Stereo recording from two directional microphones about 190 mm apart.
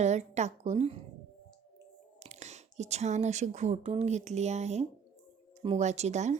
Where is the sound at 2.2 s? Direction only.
35° right (ahead or behind).